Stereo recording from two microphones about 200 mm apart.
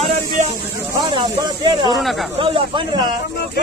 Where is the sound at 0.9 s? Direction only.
20° right (ahead or behind).